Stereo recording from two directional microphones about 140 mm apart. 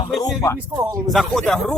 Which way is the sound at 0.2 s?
25° left (ahead or behind).